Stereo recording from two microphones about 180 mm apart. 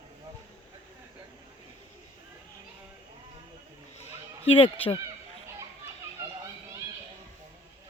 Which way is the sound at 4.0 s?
30° left (ahead or behind).